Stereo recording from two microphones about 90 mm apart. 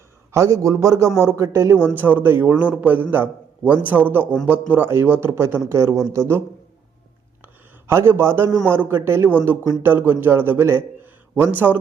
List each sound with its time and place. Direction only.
0.3 s a man's voice: 30° right (ahead or behind)
7.4 s a sound: 25° right (ahead or behind)
8.7 s a man's voice: 25° right (ahead or behind)